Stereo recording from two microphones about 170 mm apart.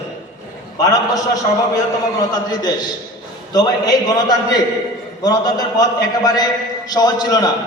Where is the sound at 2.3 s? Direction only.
25° left (ahead or behind).